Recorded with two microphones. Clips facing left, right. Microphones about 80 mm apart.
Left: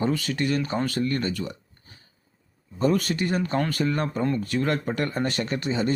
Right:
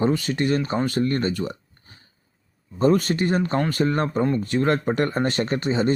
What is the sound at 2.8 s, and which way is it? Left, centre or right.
Speech, right.